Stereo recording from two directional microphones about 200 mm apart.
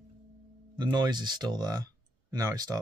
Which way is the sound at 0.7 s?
20° right (ahead or behind).